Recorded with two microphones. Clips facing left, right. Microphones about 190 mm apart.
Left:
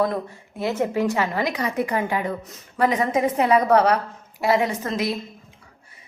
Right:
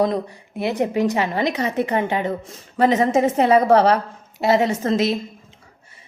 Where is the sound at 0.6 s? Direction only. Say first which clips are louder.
Right 2 dB; 15° right (ahead or behind).